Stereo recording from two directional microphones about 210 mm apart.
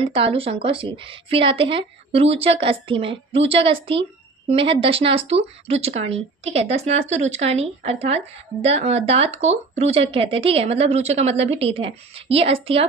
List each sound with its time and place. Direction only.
0.0 s speech: 25° right (ahead or behind)